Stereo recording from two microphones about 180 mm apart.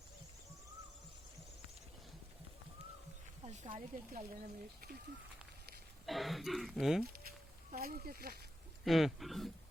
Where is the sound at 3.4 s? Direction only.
40° right (ahead or behind).